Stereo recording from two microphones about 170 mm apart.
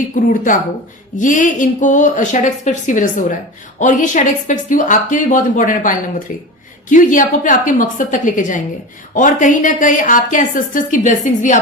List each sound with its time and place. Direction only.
0.1 s speech: 50° left (ahead or behind)